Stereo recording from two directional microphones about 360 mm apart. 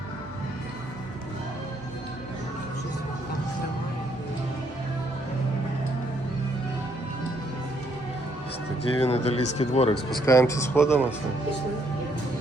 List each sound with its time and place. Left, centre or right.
9.0 s speech: centre